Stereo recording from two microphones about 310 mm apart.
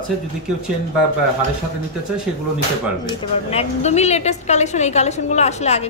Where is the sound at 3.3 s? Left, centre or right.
Centre.